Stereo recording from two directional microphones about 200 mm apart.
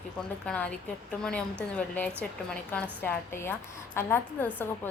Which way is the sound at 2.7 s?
10° left (ahead or behind).